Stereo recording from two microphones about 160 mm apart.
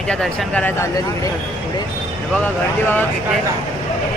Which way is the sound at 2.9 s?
10° left (ahead or behind).